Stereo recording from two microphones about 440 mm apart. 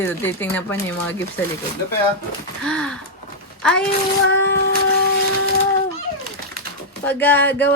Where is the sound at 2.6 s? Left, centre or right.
Centre.